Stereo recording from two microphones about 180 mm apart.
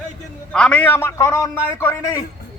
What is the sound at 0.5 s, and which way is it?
A man's voice, 5° left (ahead or behind).